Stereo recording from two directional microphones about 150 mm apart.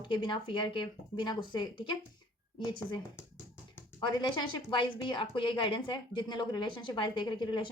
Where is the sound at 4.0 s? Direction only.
30° left (ahead or behind).